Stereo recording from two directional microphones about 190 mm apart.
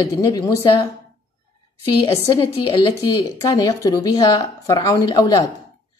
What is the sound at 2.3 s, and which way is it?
A woman's voice, 25° left (ahead or behind).